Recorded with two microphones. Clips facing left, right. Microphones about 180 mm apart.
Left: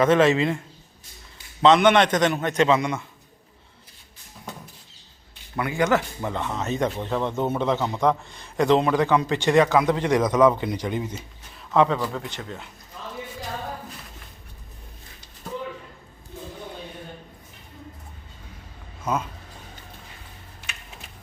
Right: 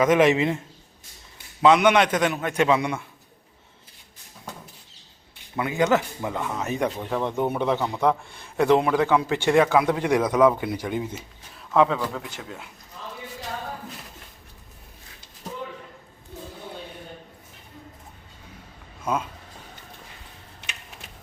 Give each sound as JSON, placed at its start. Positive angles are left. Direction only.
{"t": 0.0, "sound": "a man's voice", "side_deg": -15}
{"t": 1.6, "sound": "a man's voice", "side_deg": -10}
{"t": 5.5, "sound": "a man's voice", "side_deg": -20}
{"t": 7.8, "sound": "a man's voice", "side_deg": 20}
{"t": 8.5, "sound": "a man's voice", "side_deg": -10}
{"t": 19.0, "sound": "speech", "side_deg": -10}